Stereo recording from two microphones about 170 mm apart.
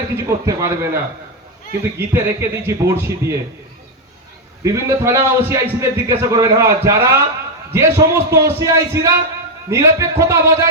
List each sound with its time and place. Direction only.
0.2 s a man's voice: 15° right (ahead or behind)
2.0 s a man's voice: 15° right (ahead or behind)
4.6 s a man's voice: 15° right (ahead or behind)